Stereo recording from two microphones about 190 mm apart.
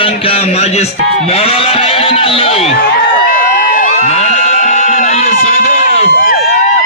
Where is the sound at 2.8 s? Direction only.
45° left (ahead or behind).